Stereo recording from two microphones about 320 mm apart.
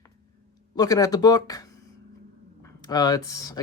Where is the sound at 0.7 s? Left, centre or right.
Centre.